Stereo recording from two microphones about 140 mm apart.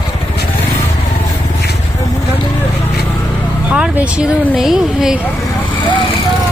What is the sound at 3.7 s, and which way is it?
Vehicle, 5° right (ahead or behind).